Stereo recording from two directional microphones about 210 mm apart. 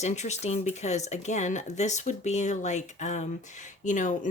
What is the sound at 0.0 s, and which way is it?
Speech, 30° left (ahead or behind).